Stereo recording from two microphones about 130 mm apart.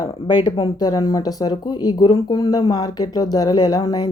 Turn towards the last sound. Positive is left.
turn(degrees=30)  # may be behind; listen again after turning